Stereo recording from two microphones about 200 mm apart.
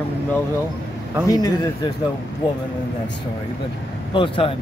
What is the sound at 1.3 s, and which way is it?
Speech, 20° left (ahead or behind).